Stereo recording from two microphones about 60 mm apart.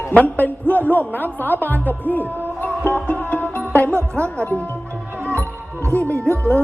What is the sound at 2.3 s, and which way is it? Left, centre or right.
Music, right.